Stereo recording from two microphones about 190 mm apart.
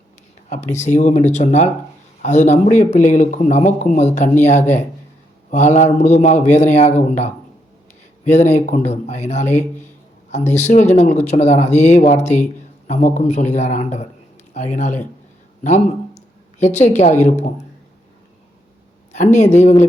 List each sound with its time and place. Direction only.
0.5 s a man's voice: 40° left (ahead or behind)
15.6 s a sound: 35° left (ahead or behind)
16.9 s a man's voice: 35° left (ahead or behind)
19.1 s a man's voice: 40° left (ahead or behind)